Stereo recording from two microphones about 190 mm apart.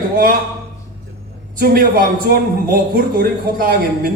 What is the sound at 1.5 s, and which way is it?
A man's voice, 50° right (ahead or behind).